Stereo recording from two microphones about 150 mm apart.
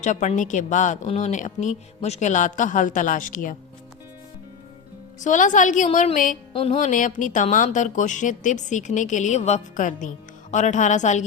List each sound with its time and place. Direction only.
0.0 s a woman's voice: 50° left (ahead or behind)
5.2 s a woman's voice: 55° left (ahead or behind)
6.5 s a woman's voice: 40° left (ahead or behind)